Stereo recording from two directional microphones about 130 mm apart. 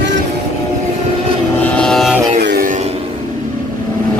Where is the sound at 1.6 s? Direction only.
10° left (ahead or behind).